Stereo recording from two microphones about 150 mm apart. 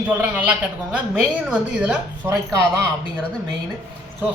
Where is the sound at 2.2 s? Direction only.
20° right (ahead or behind).